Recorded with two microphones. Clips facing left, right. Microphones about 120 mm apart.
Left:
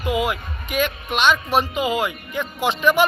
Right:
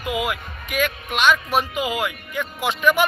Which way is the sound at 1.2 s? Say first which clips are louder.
Even; 30° left (ahead or behind).